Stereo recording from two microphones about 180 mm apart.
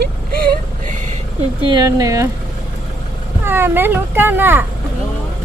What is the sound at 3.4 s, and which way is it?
Speech, 10° right (ahead or behind).